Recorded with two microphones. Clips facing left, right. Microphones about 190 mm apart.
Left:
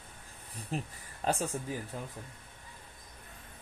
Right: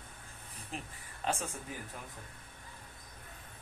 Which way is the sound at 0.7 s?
40° left (ahead or behind).